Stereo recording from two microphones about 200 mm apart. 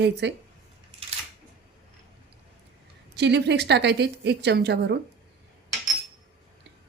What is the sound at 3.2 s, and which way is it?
A woman's voice, 60° right (ahead or behind).